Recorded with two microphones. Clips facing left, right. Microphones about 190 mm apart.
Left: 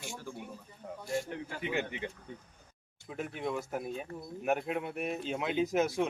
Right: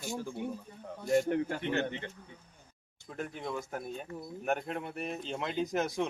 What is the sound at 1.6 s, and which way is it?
Speech, 10° left (ahead or behind).